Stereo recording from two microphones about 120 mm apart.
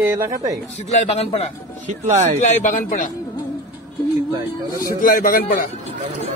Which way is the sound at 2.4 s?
90° left.